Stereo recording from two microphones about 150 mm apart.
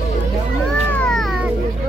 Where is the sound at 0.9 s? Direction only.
5° left (ahead or behind).